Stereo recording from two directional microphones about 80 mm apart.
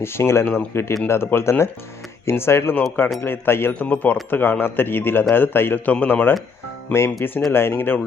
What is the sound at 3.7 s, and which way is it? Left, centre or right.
A man's voice, centre.